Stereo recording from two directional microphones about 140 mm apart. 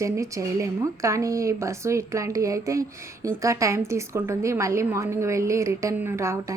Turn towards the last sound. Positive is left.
turn(degrees=-20)  # may be behind; listen again after turning